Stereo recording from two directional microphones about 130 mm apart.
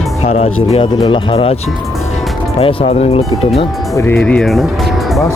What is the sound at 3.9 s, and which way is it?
Speech, 20° left (ahead or behind).